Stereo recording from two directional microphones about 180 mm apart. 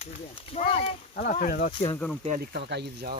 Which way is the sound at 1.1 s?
50° left (ahead or behind).